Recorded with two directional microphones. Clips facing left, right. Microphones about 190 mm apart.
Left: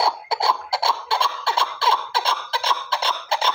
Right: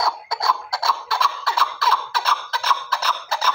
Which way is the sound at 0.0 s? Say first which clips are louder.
Left 2 dB; 30° left (ahead or behind).